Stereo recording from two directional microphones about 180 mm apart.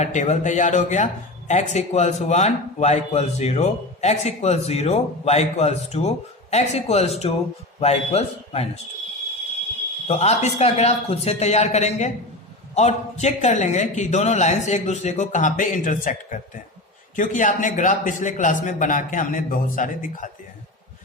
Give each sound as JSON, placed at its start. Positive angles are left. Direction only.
{"t": 0.0, "sound": "a woman's voice", "side_deg": 40}
{"t": 10.1, "sound": "a woman's voice", "side_deg": 40}